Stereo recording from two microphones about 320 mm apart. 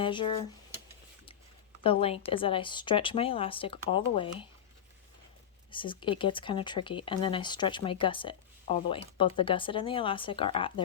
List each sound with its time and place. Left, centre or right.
0.0 s speech: centre
1.8 s speech: centre
5.7 s speech: centre